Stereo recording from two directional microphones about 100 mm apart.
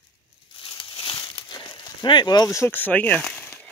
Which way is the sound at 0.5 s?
55° left (ahead or behind).